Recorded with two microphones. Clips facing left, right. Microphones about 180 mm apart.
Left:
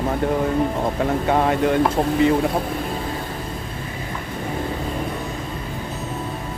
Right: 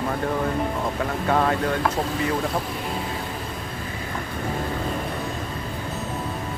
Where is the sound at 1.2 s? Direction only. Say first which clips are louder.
Left 2 dB; 20° left (ahead or behind).